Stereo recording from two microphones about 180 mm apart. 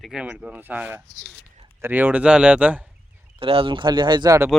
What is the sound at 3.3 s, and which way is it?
Speech, 30° right (ahead or behind).